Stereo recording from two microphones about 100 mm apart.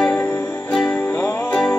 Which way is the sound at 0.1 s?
20° left (ahead or behind).